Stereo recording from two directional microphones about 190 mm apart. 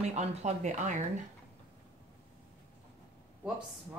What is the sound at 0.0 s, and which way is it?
Speech, 35° right (ahead or behind).